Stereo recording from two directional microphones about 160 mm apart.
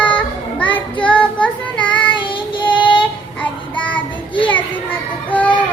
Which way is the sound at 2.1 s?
30° left (ahead or behind).